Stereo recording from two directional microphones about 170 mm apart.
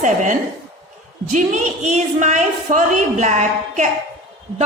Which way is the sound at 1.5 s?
45° right (ahead or behind).